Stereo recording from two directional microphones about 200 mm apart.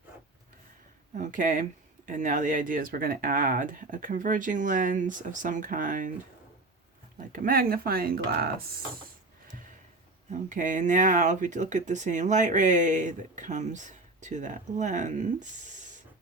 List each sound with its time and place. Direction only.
1.1 s speech: 40° right (ahead or behind)
7.2 s speech: 45° right (ahead or behind)
10.2 s speech: 40° right (ahead or behind)